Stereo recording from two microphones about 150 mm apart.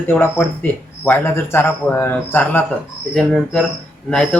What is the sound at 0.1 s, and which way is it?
A man's voice, 15° left (ahead or behind).